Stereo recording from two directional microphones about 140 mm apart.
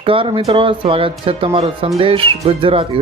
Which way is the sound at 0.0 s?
40° right (ahead or behind).